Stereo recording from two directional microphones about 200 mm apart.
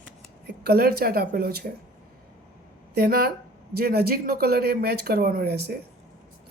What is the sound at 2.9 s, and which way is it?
Speech, 50° right (ahead or behind).